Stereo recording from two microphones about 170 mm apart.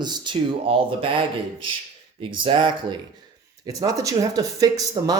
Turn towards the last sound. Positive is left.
turn(degrees=-20)  # may be behind; listen again after turning